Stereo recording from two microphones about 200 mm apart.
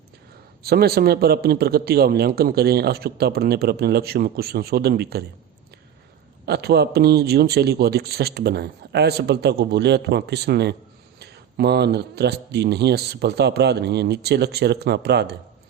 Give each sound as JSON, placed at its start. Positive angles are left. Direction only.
{"t": 0.6, "sound": "a man's voice", "side_deg": -50}
{"t": 6.4, "sound": "a man's voice", "side_deg": -55}